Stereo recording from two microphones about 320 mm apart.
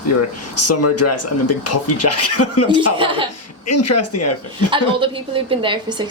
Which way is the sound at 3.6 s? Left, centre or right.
Left.